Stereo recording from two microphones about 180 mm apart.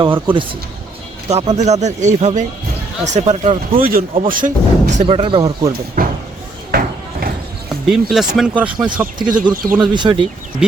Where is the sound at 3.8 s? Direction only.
55° right (ahead or behind).